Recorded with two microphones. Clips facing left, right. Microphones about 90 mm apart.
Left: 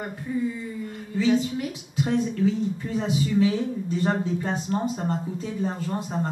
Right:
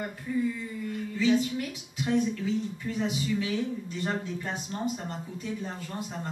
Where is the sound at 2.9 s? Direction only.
35° left (ahead or behind).